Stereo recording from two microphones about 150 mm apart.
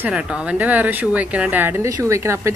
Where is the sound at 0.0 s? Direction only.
5° right (ahead or behind).